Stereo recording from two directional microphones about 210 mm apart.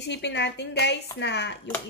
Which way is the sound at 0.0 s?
55° left (ahead or behind).